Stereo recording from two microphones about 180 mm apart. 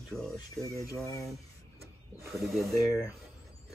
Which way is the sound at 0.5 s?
20° left (ahead or behind).